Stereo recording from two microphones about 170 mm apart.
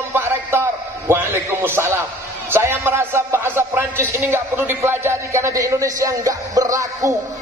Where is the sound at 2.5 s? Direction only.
15° right (ahead or behind).